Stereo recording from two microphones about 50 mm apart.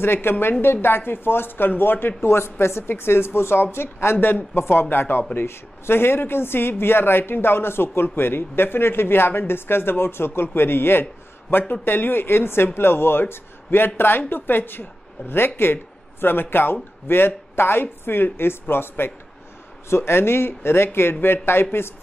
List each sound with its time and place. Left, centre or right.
0.0 s speech: left
2.2 s a woman's voice: left